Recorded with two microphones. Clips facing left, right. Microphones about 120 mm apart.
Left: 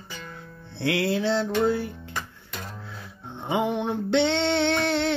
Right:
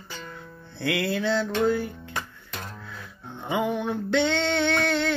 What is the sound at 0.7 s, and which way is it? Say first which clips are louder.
Music: left 2 dB; 25° left (ahead or behind).